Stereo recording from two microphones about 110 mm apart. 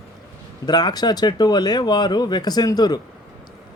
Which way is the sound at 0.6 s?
40° left (ahead or behind).